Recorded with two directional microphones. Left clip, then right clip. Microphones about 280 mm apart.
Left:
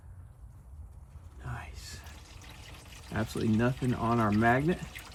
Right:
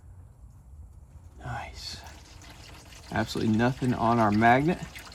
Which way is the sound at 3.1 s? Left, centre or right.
Right.